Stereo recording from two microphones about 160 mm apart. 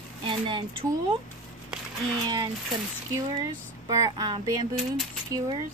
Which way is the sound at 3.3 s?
25° right (ahead or behind).